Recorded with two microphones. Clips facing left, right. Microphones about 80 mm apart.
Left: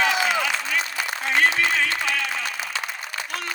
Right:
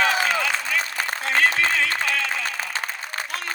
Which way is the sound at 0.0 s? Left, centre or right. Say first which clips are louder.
Even; right.